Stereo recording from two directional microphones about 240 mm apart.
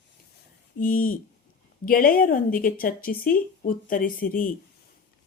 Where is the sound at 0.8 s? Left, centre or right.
Left.